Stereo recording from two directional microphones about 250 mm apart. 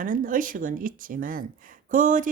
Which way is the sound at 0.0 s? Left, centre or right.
Right.